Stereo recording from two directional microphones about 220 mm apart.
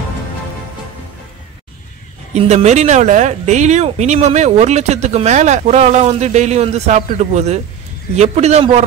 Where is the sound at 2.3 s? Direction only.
30° right (ahead or behind).